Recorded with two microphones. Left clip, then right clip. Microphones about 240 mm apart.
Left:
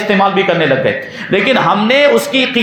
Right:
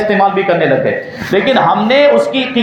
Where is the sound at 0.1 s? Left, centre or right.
Left.